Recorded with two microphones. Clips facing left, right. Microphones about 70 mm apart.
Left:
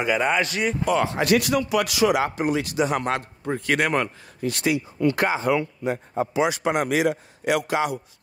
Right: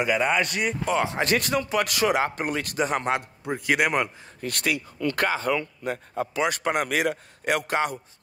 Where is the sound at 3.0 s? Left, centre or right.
Centre.